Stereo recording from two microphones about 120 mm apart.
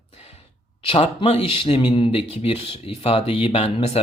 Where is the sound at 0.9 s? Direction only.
55° left (ahead or behind).